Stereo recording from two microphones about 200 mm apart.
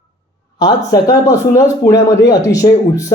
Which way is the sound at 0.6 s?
15° left (ahead or behind).